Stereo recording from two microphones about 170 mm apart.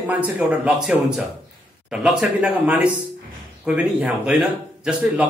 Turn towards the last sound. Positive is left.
turn(degrees=-5)  # may be behind; listen again after turning